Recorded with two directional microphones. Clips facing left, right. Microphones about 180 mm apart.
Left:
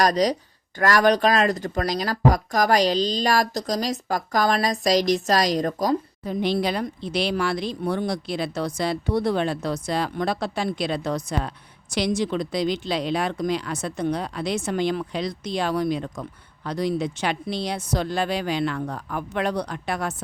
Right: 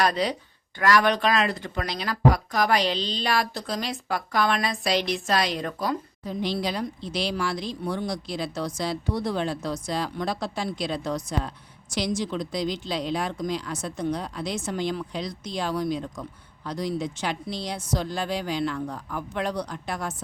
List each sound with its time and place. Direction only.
0.0 s speech: 40° left (ahead or behind)
6.2 s speech: 60° left (ahead or behind)